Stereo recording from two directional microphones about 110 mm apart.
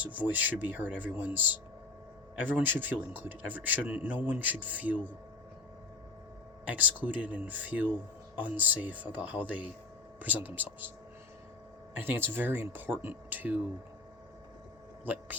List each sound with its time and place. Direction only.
0.0 s speech: 15° right (ahead or behind)
6.7 s speech: 15° right (ahead or behind)
11.9 s speech: 20° right (ahead or behind)